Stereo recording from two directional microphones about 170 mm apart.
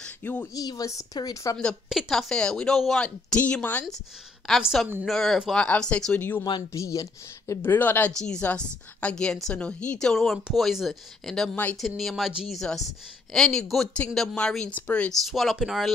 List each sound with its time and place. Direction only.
0.0 s a woman's voice: 10° left (ahead or behind)
1.6 s speech: centre (ahead or behind)
6.4 s speech: 20° left (ahead or behind); by 15.9 s centre (ahead or behind)